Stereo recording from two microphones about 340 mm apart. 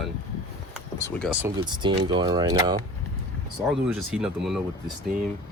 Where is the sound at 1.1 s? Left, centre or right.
Centre.